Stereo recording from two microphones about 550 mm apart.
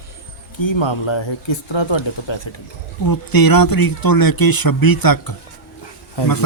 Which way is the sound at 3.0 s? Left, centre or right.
Left.